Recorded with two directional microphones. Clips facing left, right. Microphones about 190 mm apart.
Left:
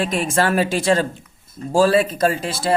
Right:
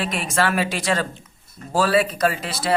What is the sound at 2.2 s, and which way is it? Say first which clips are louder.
Speech: left 3 dB; 45° left (ahead or behind).